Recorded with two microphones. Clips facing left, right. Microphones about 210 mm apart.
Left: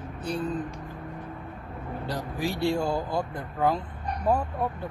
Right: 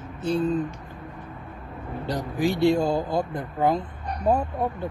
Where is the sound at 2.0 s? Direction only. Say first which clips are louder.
Right 6 dB; 20° right (ahead or behind).